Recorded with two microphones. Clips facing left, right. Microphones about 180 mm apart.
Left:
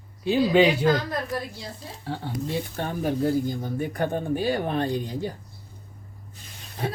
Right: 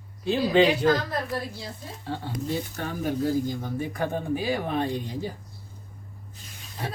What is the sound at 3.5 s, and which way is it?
Speech, 55° left (ahead or behind).